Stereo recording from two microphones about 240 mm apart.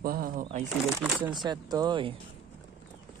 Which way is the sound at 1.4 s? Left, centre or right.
Centre.